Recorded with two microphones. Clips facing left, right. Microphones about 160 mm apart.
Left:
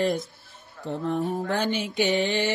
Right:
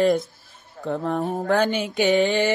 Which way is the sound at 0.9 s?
55° right (ahead or behind).